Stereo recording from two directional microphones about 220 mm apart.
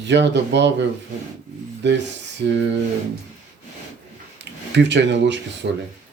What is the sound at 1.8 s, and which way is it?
Speech, 55° right (ahead or behind).